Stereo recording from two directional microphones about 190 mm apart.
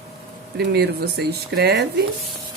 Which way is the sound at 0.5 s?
60° right (ahead or behind).